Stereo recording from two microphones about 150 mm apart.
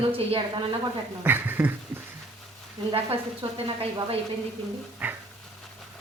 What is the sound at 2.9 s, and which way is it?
Speech, 35° right (ahead or behind).